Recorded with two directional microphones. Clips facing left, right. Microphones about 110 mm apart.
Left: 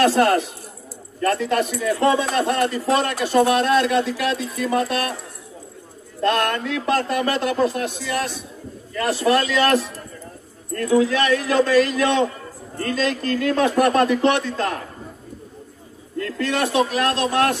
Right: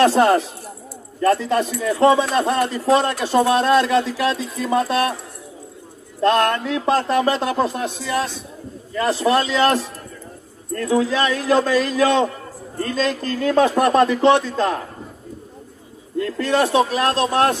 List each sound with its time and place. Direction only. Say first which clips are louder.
0.1 s speech: right 2 dB; 35° right (ahead or behind)
6.2 s speech: right 3 dB; 30° right (ahead or behind)
10.9 s speech: left 1 dB; 25° right (ahead or behind)
16.3 s speech: right 3 dB; 35° right (ahead or behind)